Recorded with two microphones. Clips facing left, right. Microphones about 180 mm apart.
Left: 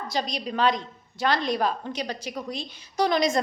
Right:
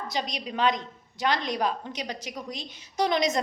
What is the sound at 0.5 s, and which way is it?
A woman's voice, 20° right (ahead or behind).